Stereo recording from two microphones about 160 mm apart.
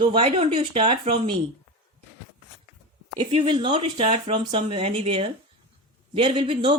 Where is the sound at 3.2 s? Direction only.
30° right (ahead or behind).